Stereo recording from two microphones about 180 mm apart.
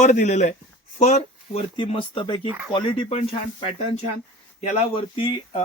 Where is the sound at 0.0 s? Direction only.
40° left (ahead or behind).